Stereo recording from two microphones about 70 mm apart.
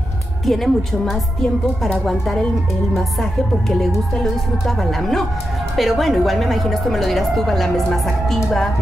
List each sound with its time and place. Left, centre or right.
0.5 s a woman's voice: centre